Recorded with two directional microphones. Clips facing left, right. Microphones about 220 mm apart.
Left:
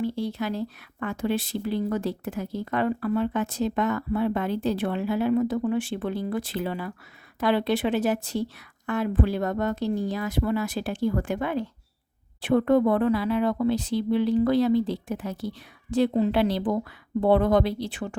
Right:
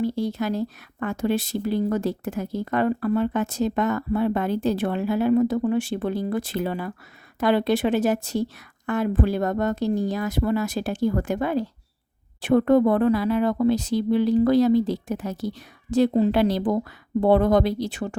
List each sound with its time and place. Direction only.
0.0 s speech: 40° right (ahead or behind)